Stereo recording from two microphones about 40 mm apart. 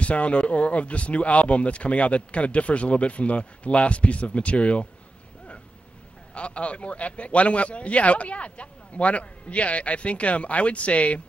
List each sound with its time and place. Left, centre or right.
0.0 s a man's voice: left
6.3 s a man's voice: left